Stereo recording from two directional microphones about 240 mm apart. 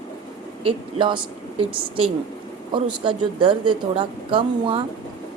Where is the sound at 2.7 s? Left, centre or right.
Centre.